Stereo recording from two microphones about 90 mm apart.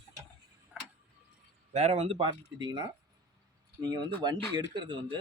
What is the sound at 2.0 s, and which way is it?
Speech, 70° right (ahead or behind).